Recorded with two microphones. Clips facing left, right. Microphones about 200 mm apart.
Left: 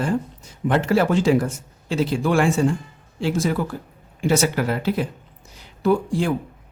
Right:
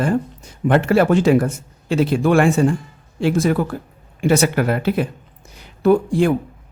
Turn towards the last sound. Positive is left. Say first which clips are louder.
# right 5 dB
turn(degrees=-55)  # may be behind; listen again after turning